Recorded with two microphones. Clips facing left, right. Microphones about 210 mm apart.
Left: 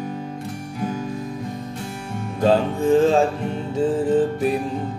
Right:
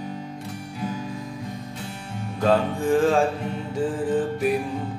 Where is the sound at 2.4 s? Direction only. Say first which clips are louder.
Left 3 dB; 25° left (ahead or behind).